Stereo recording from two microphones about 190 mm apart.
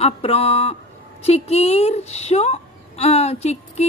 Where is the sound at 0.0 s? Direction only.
30° left (ahead or behind).